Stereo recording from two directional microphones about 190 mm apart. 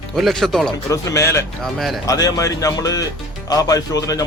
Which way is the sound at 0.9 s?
15° left (ahead or behind).